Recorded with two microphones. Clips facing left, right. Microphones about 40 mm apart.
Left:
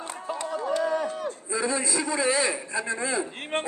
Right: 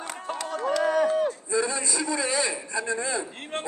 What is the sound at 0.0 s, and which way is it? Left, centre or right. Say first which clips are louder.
Run: even; right.